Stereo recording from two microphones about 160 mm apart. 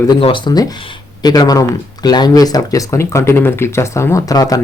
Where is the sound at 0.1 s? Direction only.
30° left (ahead or behind).